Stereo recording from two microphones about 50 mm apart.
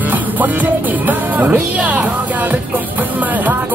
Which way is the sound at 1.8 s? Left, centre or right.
Right.